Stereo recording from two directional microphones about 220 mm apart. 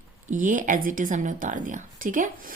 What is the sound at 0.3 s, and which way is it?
A woman's voice, 35° right (ahead or behind).